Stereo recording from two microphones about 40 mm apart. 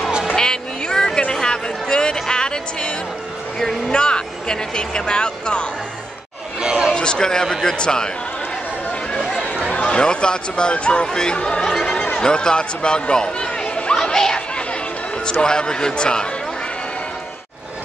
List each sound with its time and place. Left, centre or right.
0.4 s a sound: centre
1.3 s music: centre
3.9 s speech: left
6.6 s chatter: centre
6.9 s a man's voice: centre
9.7 s speech: left
11.9 s a sound: left
14.1 s a sound: centre
15.4 s speech: left